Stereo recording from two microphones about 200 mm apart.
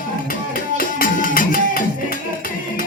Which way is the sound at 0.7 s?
45° left (ahead or behind).